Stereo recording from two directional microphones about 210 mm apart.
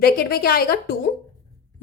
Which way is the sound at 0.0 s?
45° left (ahead or behind).